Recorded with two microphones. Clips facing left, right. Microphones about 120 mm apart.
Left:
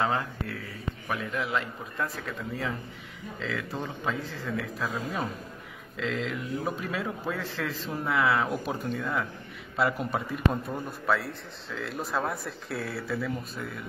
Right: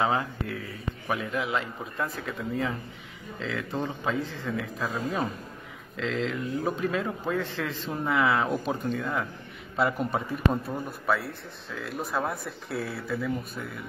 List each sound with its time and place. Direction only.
0.0 s speech: centre (ahead or behind)